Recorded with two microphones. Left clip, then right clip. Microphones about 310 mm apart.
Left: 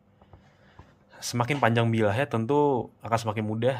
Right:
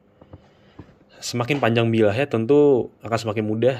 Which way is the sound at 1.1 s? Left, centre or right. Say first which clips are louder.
Right 4 dB; centre.